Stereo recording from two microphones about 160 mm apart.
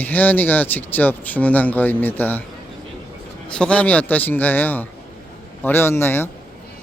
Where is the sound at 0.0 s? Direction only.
10° left (ahead or behind).